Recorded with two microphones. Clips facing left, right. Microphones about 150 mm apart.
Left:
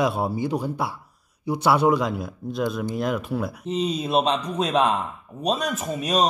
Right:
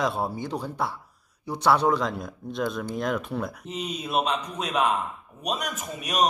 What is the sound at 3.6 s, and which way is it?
A man's voice, 30° left (ahead or behind).